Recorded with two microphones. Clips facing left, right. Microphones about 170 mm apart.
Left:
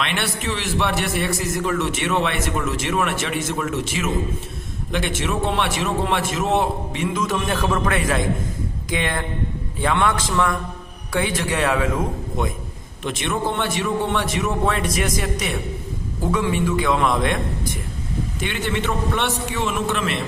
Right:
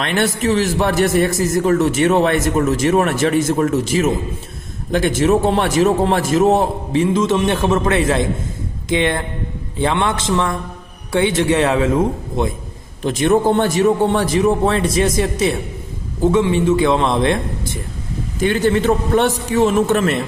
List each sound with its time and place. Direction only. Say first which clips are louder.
0.0 s a man's voice: right 7 dB; 40° right (ahead or behind); by 11.9 s 25° right (ahead or behind)
13.0 s a man's voice: right 9 dB; 40° right (ahead or behind)
18.3 s a man's voice: right 11 dB; 40° right (ahead or behind)